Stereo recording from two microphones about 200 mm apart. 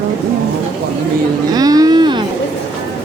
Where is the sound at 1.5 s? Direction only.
20° right (ahead or behind).